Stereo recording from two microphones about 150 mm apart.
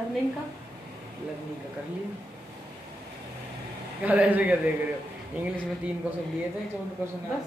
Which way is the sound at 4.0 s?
10° right (ahead or behind).